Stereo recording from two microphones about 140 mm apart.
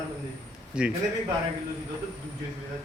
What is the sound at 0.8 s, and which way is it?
Speech, 5° right (ahead or behind).